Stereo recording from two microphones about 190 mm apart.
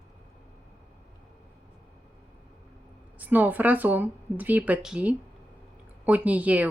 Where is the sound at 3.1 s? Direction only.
10° right (ahead or behind).